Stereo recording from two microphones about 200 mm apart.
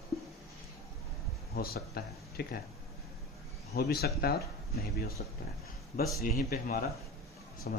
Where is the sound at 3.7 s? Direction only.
50° left (ahead or behind).